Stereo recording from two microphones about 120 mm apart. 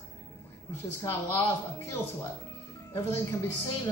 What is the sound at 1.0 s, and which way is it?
Speech, 25° left (ahead or behind).